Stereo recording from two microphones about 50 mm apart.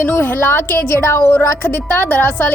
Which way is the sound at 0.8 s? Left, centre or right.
Left.